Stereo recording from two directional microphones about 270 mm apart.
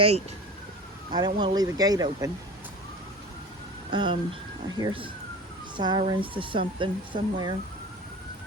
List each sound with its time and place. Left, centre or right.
1.1 s speech: centre
3.9 s speech: centre